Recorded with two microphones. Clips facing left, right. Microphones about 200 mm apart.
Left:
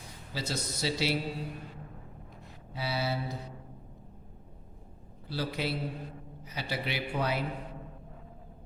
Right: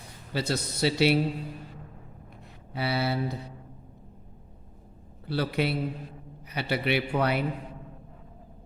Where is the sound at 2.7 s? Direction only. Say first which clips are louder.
Right 5 dB; 65° right (ahead or behind).